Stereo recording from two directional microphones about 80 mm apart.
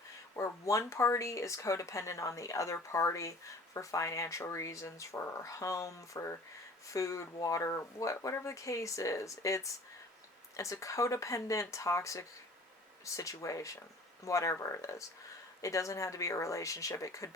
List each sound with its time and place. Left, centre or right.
0.3 s speech: left